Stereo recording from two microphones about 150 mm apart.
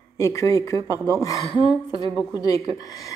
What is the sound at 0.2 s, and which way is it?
Speech, 20° left (ahead or behind).